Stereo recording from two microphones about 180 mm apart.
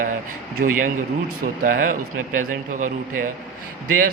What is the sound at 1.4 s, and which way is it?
Speech, 50° right (ahead or behind).